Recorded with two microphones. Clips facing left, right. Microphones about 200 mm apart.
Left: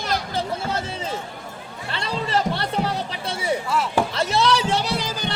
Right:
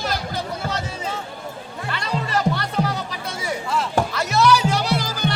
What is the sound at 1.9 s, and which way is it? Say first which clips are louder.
Music: left 1 dB; 30° left (ahead or behind).